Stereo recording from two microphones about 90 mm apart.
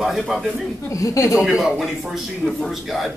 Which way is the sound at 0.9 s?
40° left (ahead or behind).